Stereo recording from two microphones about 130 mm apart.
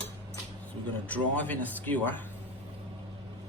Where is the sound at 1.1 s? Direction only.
10° left (ahead or behind).